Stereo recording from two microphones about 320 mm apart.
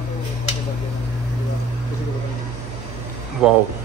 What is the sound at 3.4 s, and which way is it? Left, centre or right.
Speech, centre.